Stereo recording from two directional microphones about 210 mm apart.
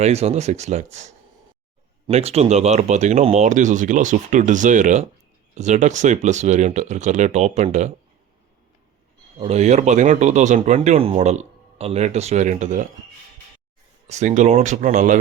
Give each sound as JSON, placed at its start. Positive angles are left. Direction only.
{"t": 0.0, "sound": "speech", "side_deg": -30}
{"t": 9.4, "sound": "speech", "side_deg": -30}
{"t": 14.1, "sound": "speech", "side_deg": -35}